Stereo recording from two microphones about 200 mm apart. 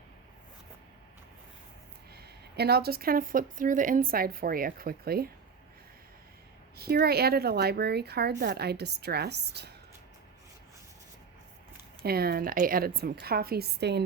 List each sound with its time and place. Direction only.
2.1 s a woman's voice: 55° right (ahead or behind)
6.7 s a woman's voice: 50° right (ahead or behind)
12.0 s a woman's voice: 50° right (ahead or behind)